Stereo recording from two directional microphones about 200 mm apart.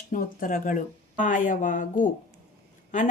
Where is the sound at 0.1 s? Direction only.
45° left (ahead or behind).